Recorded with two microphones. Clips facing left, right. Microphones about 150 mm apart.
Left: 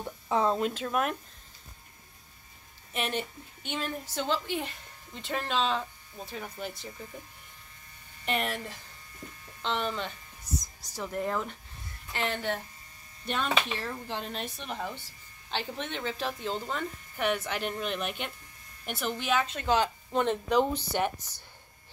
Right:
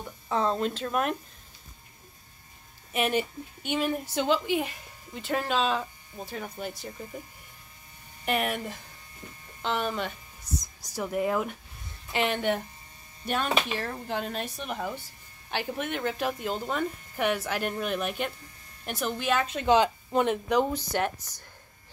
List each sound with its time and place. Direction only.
0.3 s speech: 10° left (ahead or behind)
2.9 s a woman's voice: 10° right (ahead or behind)
8.3 s a woman's voice: 10° right (ahead or behind)
19.5 s speech: 20° right (ahead or behind)